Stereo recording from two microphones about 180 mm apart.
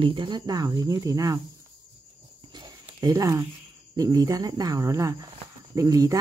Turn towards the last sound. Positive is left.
turn(degrees=-20)  # may be behind; listen again after turning